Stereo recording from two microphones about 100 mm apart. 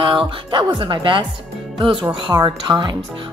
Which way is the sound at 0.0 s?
55° right (ahead or behind).